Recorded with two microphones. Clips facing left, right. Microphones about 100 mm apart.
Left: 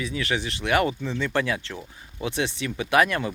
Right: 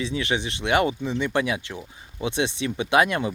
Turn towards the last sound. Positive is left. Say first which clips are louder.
# right 1 dB
turn(degrees=-20)  # may be behind; listen again after turning